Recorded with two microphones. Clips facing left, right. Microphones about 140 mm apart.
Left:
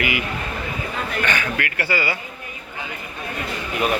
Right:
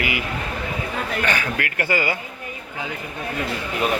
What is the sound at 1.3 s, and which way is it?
Speech, 35° right (ahead or behind).